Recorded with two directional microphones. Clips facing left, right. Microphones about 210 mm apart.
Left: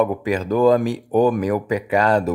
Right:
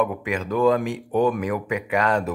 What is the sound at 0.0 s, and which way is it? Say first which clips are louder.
Speech: left 4 dB; 35° left (ahead or behind).